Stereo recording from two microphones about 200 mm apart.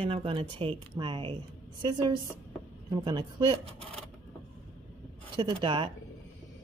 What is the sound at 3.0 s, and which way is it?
Speech, 20° right (ahead or behind).